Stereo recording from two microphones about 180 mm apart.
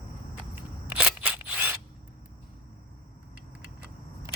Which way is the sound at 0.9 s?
5° right (ahead or behind).